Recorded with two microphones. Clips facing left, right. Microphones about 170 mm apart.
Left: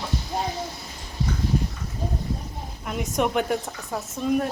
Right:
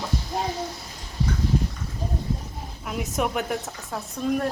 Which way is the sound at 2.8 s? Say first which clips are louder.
Left 2 dB; centre (ahead or behind).